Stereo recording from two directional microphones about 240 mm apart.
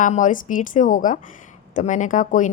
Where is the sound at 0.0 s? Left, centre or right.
Left.